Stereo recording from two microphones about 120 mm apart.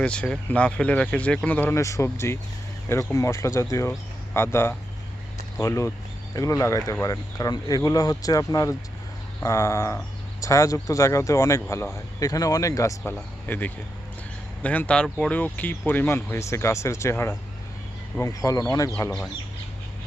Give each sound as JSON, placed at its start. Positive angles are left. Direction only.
{"t": 0.0, "sound": "speech", "side_deg": 10}